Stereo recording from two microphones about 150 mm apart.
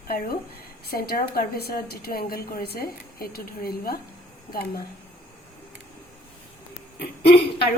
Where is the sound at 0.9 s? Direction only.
85° left.